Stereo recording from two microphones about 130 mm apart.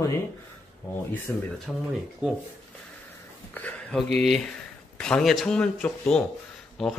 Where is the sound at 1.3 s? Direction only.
Centre (ahead or behind).